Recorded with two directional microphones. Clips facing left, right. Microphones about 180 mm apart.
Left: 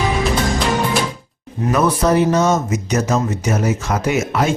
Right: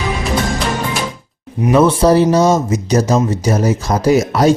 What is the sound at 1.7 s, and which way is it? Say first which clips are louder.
Speech: right 5 dB; 30° right (ahead or behind).